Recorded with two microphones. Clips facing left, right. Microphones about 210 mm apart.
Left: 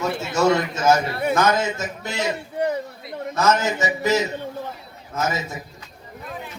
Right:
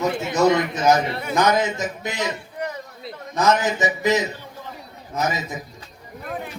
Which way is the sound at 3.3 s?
15° right (ahead or behind).